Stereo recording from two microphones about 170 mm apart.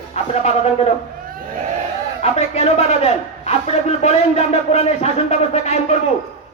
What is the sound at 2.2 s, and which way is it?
A man's voice, 40° left (ahead or behind).